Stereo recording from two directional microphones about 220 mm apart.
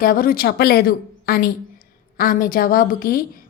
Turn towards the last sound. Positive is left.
turn(degrees=40)  # may be behind; listen again after turning